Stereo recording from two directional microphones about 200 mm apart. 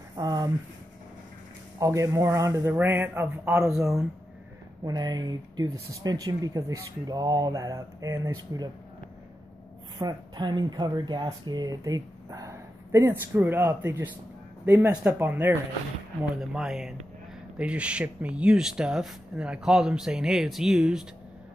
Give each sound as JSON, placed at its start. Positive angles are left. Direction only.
{"t": 0.1, "sound": "a sound", "side_deg": -20}
{"t": 1.8, "sound": "speech", "side_deg": -15}
{"t": 4.8, "sound": "speech", "side_deg": -20}
{"t": 9.9, "sound": "speech", "side_deg": -20}